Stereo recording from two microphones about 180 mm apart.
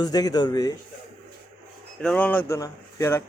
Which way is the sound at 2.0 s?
5° left (ahead or behind).